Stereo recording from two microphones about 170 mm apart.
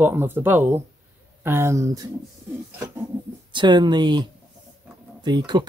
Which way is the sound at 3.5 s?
25° right (ahead or behind).